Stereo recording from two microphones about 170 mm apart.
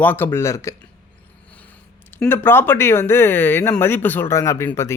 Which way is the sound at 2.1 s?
10° left (ahead or behind).